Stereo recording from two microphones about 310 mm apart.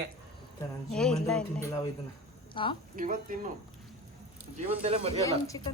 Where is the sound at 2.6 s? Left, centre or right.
Centre.